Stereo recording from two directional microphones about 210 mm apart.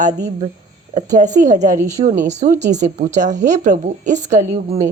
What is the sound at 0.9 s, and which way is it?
Speech, 35° right (ahead or behind).